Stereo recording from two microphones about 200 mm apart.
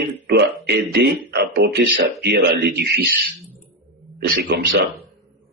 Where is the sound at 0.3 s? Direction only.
55° right (ahead or behind).